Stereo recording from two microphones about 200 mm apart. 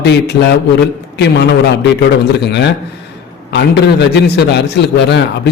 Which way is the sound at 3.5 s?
60° left (ahead or behind).